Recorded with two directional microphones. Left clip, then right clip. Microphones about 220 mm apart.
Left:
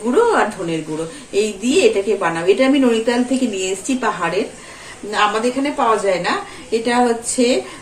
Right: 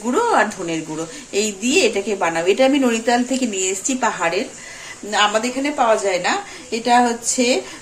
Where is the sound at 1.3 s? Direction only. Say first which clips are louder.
Left 2 dB; 30° right (ahead or behind).